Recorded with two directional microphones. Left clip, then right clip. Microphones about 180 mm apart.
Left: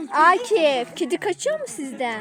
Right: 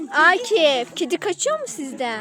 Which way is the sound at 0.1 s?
15° left (ahead or behind).